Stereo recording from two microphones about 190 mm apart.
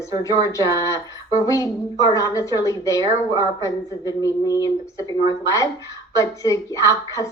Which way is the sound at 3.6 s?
20° left (ahead or behind).